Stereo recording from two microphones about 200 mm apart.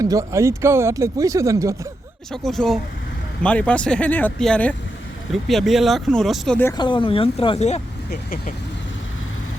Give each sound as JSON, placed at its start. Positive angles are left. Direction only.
{"t": 0.0, "sound": "speech", "side_deg": -15}
{"t": 2.3, "sound": "speech", "side_deg": 0}
{"t": 6.7, "sound": "speech", "side_deg": 25}
{"t": 8.1, "sound": "speech", "side_deg": 45}